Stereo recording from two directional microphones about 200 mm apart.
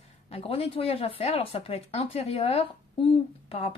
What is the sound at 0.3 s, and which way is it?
Speech, 30° left (ahead or behind).